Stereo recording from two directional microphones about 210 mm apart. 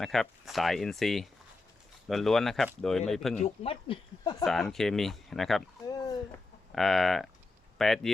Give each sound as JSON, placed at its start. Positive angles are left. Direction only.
{"t": 0.0, "sound": "speech", "side_deg": 0}
{"t": 3.4, "sound": "speech", "side_deg": 25}
{"t": 4.4, "sound": "speech", "side_deg": 0}
{"t": 5.9, "sound": "a sound", "side_deg": 15}
{"t": 6.7, "sound": "speech", "side_deg": 0}